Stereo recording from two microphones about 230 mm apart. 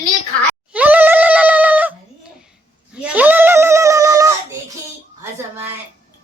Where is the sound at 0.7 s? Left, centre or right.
Centre.